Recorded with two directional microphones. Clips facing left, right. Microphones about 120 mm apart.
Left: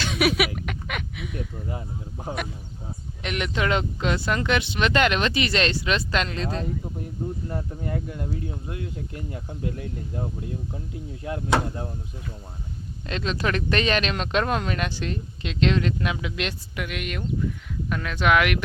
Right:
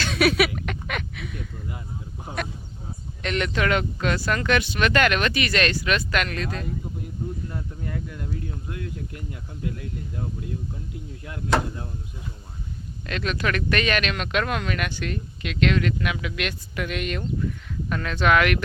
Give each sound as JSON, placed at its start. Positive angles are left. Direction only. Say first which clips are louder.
{"t": 0.0, "sound": "a sound", "louder": "right 2 dB", "side_deg": 15}
{"t": 3.2, "sound": "speech", "louder": "right 1 dB", "side_deg": 15}
{"t": 13.1, "sound": "speech", "louder": "even", "side_deg": 25}
{"t": 16.7, "sound": "speech", "louder": "right 3 dB", "side_deg": 10}